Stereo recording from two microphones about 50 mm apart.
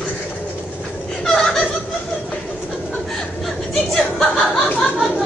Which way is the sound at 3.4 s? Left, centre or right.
Centre.